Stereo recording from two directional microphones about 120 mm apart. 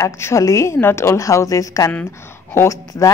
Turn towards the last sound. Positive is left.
turn(degrees=25)  # may be behind; listen again after turning